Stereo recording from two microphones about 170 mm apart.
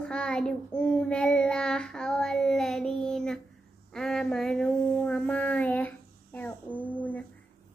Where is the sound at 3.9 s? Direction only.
5° left (ahead or behind).